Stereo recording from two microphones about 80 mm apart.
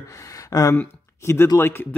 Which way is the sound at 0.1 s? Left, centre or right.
Left.